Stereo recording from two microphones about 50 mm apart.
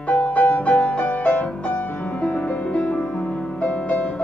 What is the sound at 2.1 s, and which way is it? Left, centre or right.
Music, left.